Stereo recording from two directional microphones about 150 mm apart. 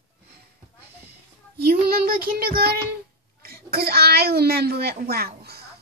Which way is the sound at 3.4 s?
90° right.